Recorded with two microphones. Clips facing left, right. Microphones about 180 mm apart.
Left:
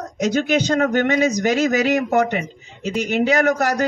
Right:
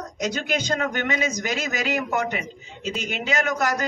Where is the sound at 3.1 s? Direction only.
40° left (ahead or behind).